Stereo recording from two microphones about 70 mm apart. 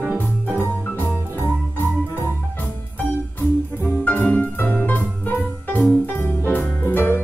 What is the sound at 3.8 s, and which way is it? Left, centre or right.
Music, left.